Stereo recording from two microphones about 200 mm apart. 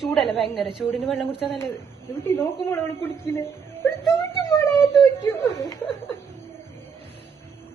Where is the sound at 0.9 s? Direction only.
Centre (ahead or behind).